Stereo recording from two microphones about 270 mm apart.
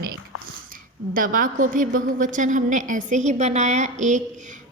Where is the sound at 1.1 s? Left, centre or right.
Right.